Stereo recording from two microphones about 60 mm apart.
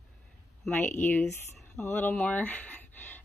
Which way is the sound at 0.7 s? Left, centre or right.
Left.